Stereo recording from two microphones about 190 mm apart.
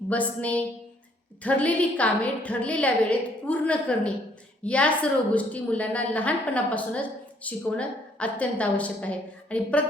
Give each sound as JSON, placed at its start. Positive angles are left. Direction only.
{"t": 0.1, "sound": "a woman's voice", "side_deg": 5}